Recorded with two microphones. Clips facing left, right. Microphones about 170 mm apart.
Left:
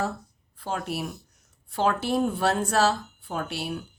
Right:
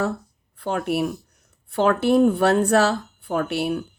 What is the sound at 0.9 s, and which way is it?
Speech, 60° right (ahead or behind).